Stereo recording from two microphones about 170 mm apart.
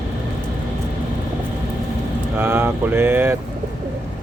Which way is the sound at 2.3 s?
15° right (ahead or behind).